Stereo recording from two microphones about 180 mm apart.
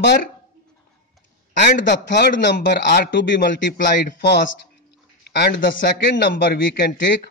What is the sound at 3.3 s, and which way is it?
Speech, 50° left (ahead or behind).